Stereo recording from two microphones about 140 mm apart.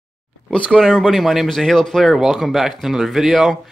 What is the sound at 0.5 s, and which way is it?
Speech, 5° left (ahead or behind).